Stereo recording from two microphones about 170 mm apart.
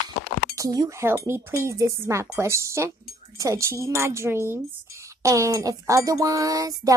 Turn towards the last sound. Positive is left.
turn(degrees=-20)  # may be behind; listen again after turning